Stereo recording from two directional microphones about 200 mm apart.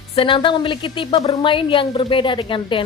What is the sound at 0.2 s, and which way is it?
A woman's voice, 25° left (ahead or behind).